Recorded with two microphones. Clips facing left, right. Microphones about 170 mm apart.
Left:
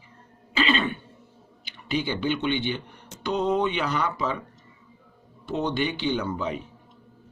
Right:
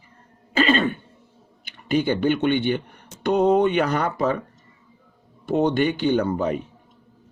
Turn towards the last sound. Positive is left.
turn(degrees=-50)  # may be behind; listen again after turning